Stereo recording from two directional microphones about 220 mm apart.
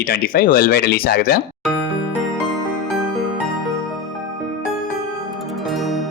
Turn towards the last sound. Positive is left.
turn(degrees=0)  # may be behind; listen again after turning